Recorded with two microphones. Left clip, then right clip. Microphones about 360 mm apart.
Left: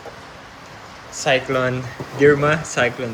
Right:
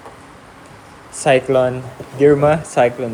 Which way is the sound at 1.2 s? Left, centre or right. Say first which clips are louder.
Right 5 dB; centre.